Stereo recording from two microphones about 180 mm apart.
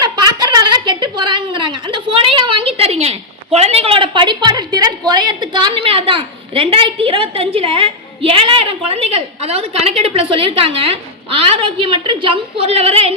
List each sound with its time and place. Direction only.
0.0 s a woman's voice: 20° right (ahead or behind)